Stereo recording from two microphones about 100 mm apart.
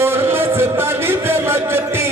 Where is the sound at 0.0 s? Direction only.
25° right (ahead or behind).